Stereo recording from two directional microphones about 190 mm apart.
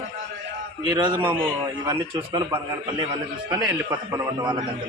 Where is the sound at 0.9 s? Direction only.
25° right (ahead or behind).